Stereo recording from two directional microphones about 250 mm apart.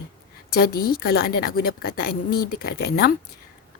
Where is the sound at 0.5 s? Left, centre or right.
Left.